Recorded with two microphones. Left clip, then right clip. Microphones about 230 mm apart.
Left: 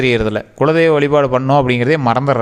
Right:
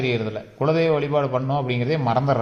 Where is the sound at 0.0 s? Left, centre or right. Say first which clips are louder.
Left 10 dB; left.